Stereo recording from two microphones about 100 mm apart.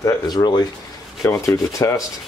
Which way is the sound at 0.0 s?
45° left (ahead or behind).